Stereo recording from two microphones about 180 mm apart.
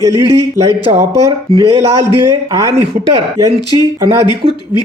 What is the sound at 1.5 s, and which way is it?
Speech, 20° right (ahead or behind).